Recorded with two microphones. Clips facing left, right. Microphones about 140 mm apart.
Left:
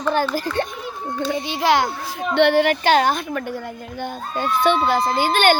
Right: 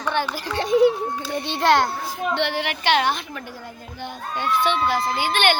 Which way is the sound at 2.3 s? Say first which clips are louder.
Left 11 dB; 55° left (ahead or behind).